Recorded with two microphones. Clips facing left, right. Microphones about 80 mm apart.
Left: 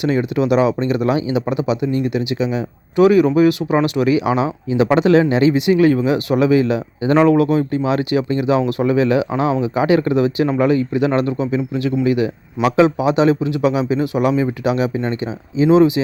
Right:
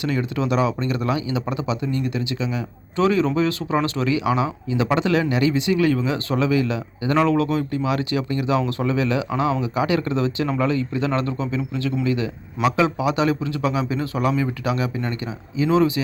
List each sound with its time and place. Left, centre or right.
0.0 s speech: left